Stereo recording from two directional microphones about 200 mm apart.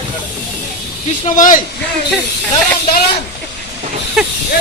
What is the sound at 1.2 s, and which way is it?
Speech, 40° left (ahead or behind).